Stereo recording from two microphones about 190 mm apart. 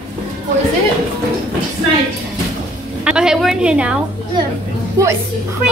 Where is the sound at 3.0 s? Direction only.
5° right (ahead or behind).